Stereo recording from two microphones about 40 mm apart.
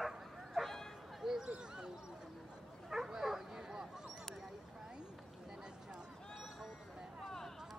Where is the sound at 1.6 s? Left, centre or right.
Right.